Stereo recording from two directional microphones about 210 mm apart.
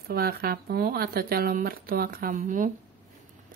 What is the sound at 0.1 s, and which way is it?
Speech, 45° right (ahead or behind).